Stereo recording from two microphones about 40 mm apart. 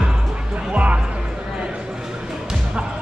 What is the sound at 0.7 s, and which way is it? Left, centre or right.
Music, right.